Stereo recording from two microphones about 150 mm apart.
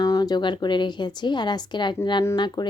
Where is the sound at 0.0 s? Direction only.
25° left (ahead or behind).